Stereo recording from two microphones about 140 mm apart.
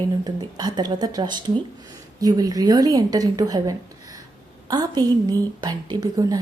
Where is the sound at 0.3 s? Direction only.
30° right (ahead or behind).